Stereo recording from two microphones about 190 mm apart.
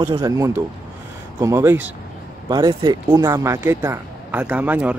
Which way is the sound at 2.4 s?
25° right (ahead or behind).